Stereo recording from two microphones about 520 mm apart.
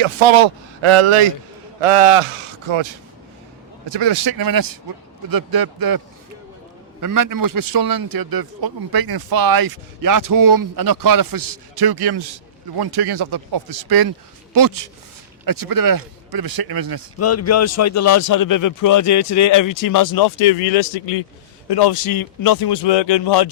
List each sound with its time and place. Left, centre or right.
0.0 s a man's voice: right
1.8 s a man's voice: right
3.8 s a man's voice: right
7.0 s a man's voice: right
17.2 s speech: left
20.4 s speech: left
21.7 s speech: left